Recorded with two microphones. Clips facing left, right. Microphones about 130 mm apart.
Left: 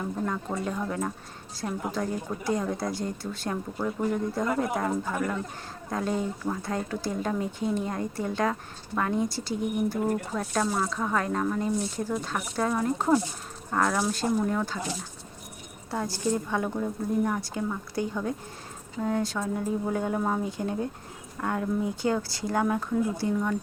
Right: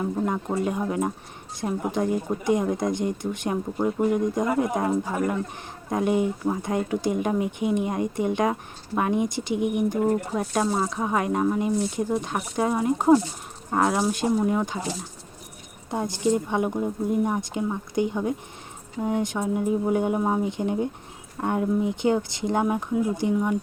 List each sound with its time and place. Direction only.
0.0 s speech: 20° right (ahead or behind)
15.9 s speech: 20° right (ahead or behind)